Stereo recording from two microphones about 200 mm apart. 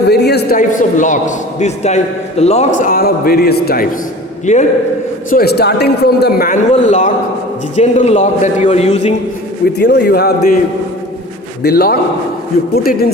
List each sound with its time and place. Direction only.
0.1 s a man's voice: 55° left (ahead or behind)
4.5 s a man's voice: 35° left (ahead or behind)
5.3 s a man's voice: 50° left (ahead or behind); by 9.1 s 35° left (ahead or behind)
9.7 s a man's voice: 55° left (ahead or behind)
11.6 s a man's voice: 50° left (ahead or behind)